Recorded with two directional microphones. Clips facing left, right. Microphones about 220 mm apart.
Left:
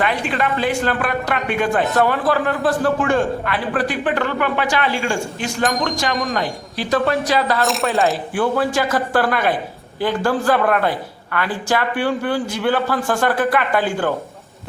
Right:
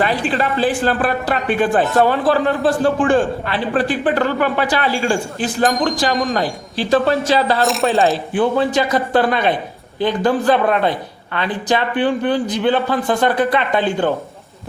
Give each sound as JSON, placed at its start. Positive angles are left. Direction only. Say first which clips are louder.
{"t": 0.0, "sound": "a man's voice", "louder": "right 2 dB", "side_deg": -35}
{"t": 7.6, "sound": "coin", "louder": "right 3 dB", "side_deg": 0}
{"t": 8.3, "sound": "a woman's voice", "louder": "right 3 dB", "side_deg": -20}